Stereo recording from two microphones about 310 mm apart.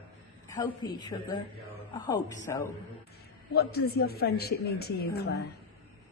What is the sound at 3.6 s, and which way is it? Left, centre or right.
A woman's voice, left.